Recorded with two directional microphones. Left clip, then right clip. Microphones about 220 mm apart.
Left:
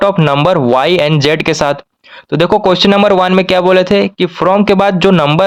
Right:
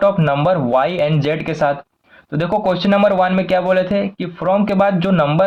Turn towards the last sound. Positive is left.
turn(degrees=45)  # may be behind; listen again after turning